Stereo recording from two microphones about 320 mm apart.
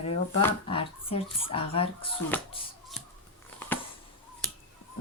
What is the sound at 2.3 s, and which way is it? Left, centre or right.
Speech, centre.